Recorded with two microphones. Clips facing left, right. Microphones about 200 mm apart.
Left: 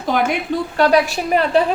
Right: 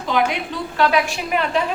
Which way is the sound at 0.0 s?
45° left (ahead or behind).